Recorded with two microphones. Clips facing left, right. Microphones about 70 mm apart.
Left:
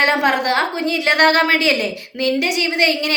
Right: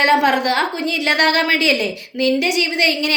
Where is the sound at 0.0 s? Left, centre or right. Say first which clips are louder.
Right 2 dB; left.